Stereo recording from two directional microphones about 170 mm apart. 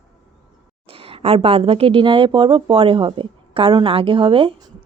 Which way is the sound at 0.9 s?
35° right (ahead or behind).